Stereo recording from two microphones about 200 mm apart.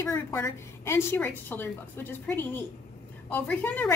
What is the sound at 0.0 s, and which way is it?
A woman's voice, 15° left (ahead or behind).